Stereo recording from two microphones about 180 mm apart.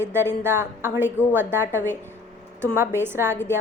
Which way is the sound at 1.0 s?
10° left (ahead or behind).